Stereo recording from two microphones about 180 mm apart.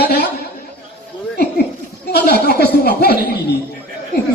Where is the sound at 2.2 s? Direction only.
60° left (ahead or behind).